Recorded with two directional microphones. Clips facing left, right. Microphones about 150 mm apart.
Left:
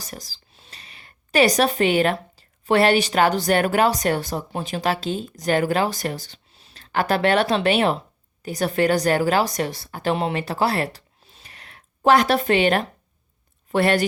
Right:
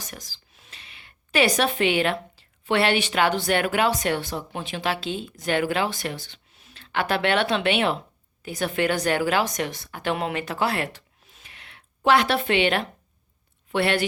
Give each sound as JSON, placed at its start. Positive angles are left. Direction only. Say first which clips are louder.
{"t": 0.0, "sound": "a woman's voice", "louder": "left 3 dB", "side_deg": 35}